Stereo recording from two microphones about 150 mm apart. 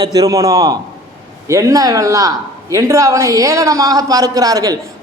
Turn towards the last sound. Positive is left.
turn(degrees=-25)  # may be behind; listen again after turning